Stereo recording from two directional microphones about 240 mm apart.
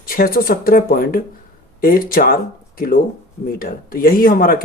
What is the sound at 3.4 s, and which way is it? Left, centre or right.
Speech, left.